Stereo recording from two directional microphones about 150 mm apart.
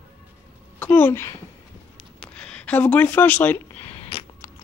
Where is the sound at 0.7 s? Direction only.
15° left (ahead or behind).